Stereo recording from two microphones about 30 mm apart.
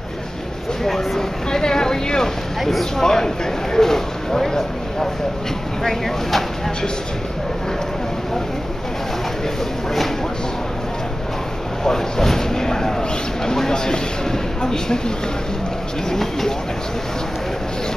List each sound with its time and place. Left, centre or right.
0.8 s speech: centre
1.5 s boat: left
2.8 s speech: centre
11.8 s a sound: centre
13.5 s speech: centre